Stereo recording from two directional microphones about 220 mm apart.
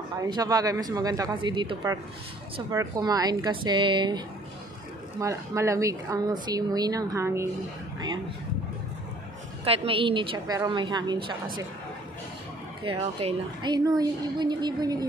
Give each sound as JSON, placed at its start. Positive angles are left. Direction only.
{"t": 0.2, "sound": "a woman's voice", "side_deg": -15}
{"t": 5.2, "sound": "speech", "side_deg": -15}
{"t": 9.7, "sound": "a woman's voice", "side_deg": -25}
{"t": 12.8, "sound": "a woman's voice", "side_deg": -25}